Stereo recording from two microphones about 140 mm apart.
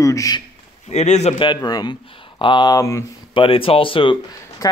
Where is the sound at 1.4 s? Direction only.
30° left (ahead or behind).